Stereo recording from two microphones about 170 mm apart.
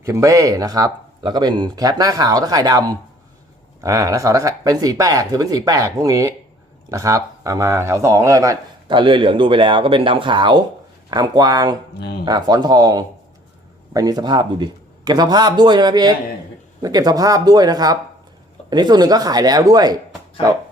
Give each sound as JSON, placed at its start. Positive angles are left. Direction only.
{"t": 0.0, "sound": "speech", "side_deg": -20}
{"t": 11.9, "sound": "speech", "side_deg": 75}
{"t": 12.2, "sound": "speech", "side_deg": -25}